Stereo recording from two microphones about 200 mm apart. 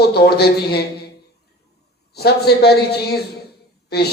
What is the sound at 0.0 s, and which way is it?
Speech, 55° left (ahead or behind).